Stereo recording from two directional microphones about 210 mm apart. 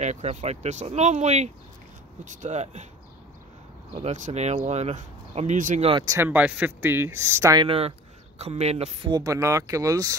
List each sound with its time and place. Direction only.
0.0 s speech: 35° right (ahead or behind)
4.0 s speech: 35° right (ahead or behind)
6.0 s speech: 10° right (ahead or behind)